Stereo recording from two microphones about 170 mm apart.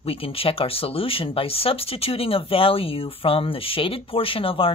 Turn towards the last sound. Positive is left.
turn(degrees=30)  # may be behind; listen again after turning